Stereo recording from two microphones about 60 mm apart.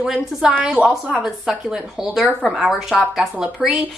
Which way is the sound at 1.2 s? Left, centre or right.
Centre.